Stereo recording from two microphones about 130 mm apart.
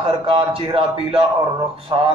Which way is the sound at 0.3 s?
40° right (ahead or behind).